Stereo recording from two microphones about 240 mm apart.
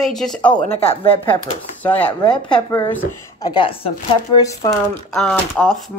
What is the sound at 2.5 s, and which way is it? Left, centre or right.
Speech, centre.